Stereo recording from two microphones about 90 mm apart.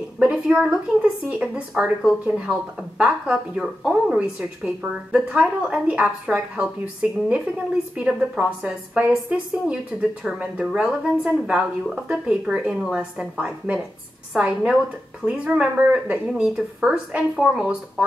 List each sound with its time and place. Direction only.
0.2 s speech: 10° right (ahead or behind)
10.2 s speech: 10° right (ahead or behind)